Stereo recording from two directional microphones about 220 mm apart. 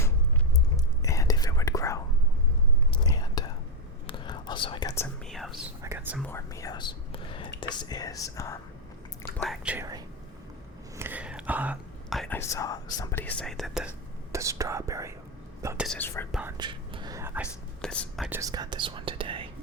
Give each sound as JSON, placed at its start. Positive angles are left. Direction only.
{"t": 1.0, "sound": "whispering", "side_deg": 15}
{"t": 5.8, "sound": "whispering", "side_deg": -15}
{"t": 6.1, "sound": "whispering", "side_deg": 10}
{"t": 9.4, "sound": "whispering", "side_deg": -5}
{"t": 12.4, "sound": "whispering", "side_deg": 15}
{"t": 14.3, "sound": "whispering", "side_deg": -15}
{"t": 15.9, "sound": "whispering", "side_deg": 10}
{"t": 16.3, "sound": "whispering", "side_deg": -10}
{"t": 16.6, "sound": "whispering", "side_deg": -20}
{"t": 17.8, "sound": "whispering", "side_deg": 5}
{"t": 18.3, "sound": "whispering", "side_deg": -15}